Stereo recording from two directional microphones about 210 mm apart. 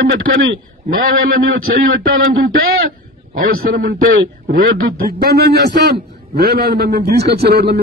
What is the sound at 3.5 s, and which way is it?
A man's voice, 45° right (ahead or behind).